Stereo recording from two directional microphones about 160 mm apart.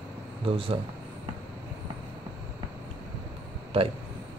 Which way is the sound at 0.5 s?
35° right (ahead or behind).